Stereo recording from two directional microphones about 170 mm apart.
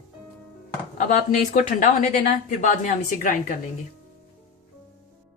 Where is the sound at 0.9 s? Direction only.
50° left (ahead or behind).